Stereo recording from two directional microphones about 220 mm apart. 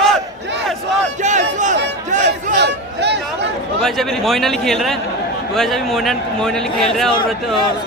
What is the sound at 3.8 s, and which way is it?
Speech, centre (ahead or behind).